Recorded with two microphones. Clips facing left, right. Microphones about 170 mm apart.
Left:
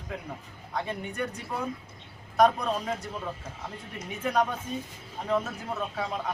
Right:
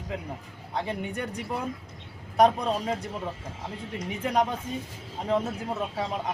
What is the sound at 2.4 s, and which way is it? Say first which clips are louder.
Speech: right 1 dB; 25° right (ahead or behind).